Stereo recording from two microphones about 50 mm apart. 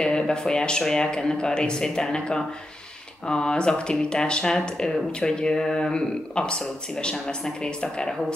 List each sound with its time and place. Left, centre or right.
0.0 s speech: centre